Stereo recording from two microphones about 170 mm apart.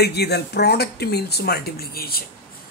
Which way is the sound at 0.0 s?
75° left (ahead or behind).